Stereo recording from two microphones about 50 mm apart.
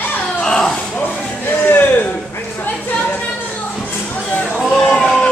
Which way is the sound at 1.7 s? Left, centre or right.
Left.